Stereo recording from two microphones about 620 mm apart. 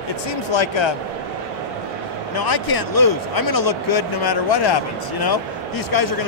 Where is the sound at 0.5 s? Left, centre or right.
Left.